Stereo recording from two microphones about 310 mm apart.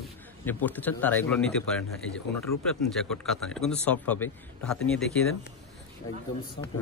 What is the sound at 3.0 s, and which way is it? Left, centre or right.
A man's voice, centre.